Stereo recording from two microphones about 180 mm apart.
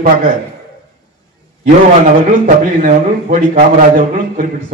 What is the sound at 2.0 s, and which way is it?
A man's voice, 50° right (ahead or behind).